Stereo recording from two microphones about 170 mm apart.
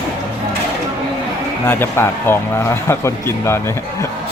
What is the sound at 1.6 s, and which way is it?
A man's voice, 15° left (ahead or behind).